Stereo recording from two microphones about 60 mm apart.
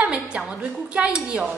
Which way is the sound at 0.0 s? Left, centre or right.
Centre.